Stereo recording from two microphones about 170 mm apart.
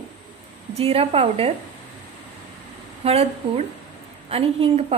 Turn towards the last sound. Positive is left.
turn(degrees=-35)  # may be behind; listen again after turning